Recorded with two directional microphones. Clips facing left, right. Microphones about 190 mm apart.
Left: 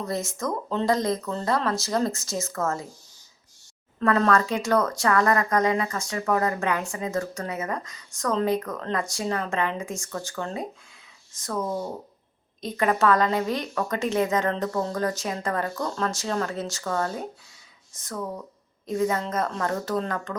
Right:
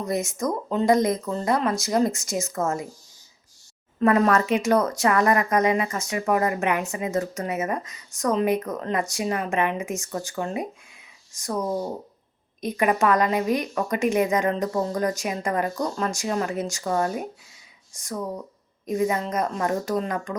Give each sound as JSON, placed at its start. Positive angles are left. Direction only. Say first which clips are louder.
{"t": 0.0, "sound": "a woman's voice", "louder": "right 3 dB", "side_deg": -20}
{"t": 4.0, "sound": "a woman's voice", "louder": "right 2 dB", "side_deg": -15}
{"t": 18.9, "sound": "a woman's voice", "louder": "right 1 dB", "side_deg": -15}